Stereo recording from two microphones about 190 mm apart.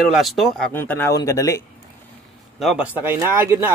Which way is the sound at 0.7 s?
10° left (ahead or behind).